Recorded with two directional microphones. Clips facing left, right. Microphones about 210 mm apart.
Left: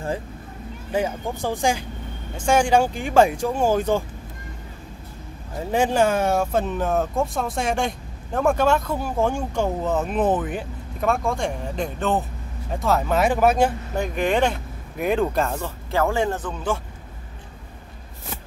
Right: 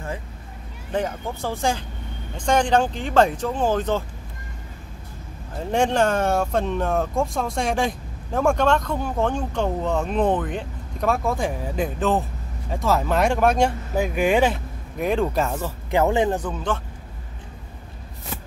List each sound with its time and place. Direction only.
0.9 s speech: 10° left (ahead or behind)
5.6 s speech: 5° left (ahead or behind)
15.9 s speech: 20° right (ahead or behind)